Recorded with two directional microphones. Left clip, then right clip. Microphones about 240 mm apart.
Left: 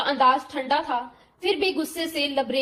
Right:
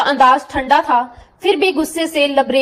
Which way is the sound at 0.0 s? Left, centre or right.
Centre.